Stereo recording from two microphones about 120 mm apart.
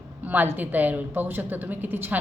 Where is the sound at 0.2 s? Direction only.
15° right (ahead or behind).